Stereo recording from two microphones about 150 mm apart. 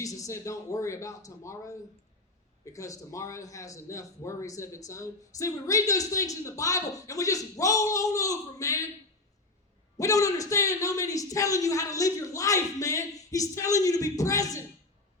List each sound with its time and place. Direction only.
0.0 s a man's voice: 20° left (ahead or behind)
10.0 s a man's voice: 20° left (ahead or behind)